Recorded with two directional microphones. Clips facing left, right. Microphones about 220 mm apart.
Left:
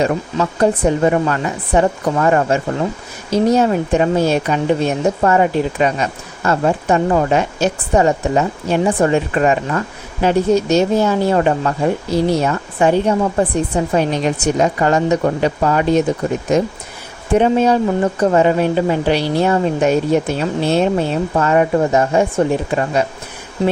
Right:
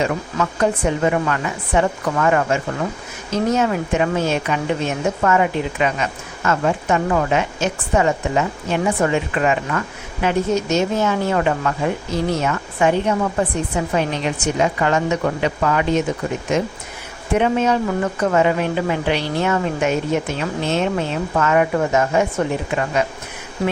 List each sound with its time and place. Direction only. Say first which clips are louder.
0.0 s speech: left 4 dB; 35° left (ahead or behind)
17.3 s speech: left 4 dB; 35° left (ahead or behind)